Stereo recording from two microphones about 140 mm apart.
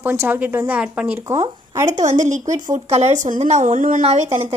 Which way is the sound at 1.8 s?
60° right (ahead or behind).